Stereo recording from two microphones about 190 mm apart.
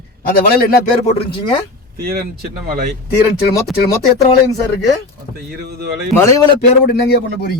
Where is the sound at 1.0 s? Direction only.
30° left (ahead or behind).